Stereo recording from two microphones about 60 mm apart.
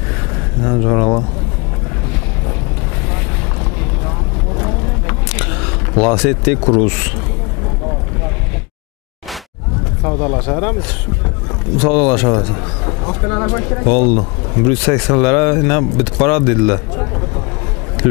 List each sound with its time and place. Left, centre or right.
0.7 s speech: left
4.6 s vehicle: left
5.3 s speech: centre
10.0 s speech: left